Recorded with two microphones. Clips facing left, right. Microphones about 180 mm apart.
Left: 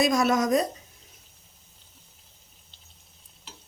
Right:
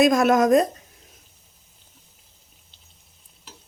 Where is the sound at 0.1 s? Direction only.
55° right (ahead or behind).